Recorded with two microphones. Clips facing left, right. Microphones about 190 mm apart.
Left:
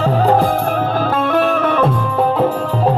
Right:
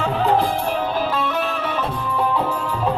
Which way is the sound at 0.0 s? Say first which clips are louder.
Left 5 dB; 40° left (ahead or behind).